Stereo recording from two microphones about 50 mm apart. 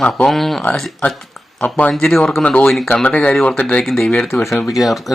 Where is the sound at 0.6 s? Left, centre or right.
Left.